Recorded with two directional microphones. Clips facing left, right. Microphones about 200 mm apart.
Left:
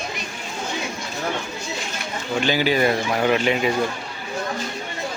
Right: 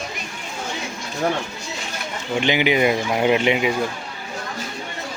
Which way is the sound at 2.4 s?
20° right (ahead or behind).